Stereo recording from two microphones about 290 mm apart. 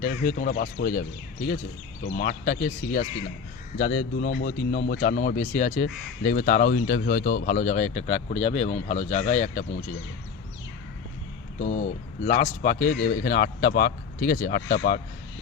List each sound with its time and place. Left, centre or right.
0.0 s speech: left
2.0 s speech: left
11.6 s speech: left